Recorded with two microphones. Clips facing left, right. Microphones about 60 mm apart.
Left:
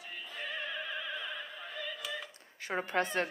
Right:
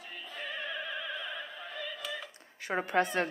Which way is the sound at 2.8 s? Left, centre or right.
Right.